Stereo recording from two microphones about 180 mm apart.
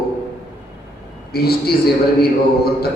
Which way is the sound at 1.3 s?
60° left (ahead or behind).